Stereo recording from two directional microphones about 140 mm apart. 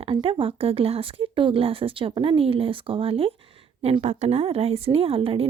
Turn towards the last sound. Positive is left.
turn(degrees=-40)  # may be behind; listen again after turning